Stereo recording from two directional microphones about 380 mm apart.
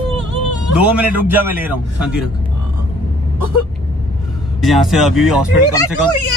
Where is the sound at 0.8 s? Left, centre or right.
Centre.